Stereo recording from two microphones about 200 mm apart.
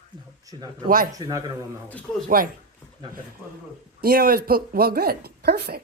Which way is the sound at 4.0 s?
50° right (ahead or behind).